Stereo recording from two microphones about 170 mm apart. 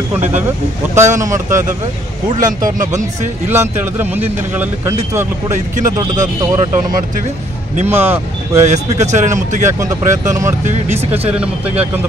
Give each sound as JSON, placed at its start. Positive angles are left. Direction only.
{"t": 0.9, "sound": "speech", "side_deg": -15}
{"t": 2.3, "sound": "speech", "side_deg": -45}
{"t": 3.4, "sound": "speech", "side_deg": -10}
{"t": 5.5, "sound": "speech", "side_deg": -45}
{"t": 5.9, "sound": "speech", "side_deg": -20}
{"t": 7.9, "sound": "speech", "side_deg": -15}
{"t": 8.6, "sound": "speech", "side_deg": -45}
{"t": 9.7, "sound": "speech", "side_deg": -15}